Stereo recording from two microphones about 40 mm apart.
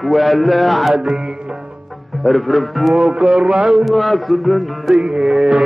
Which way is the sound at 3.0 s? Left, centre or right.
Right.